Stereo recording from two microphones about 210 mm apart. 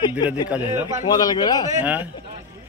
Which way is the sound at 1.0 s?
20° left (ahead or behind).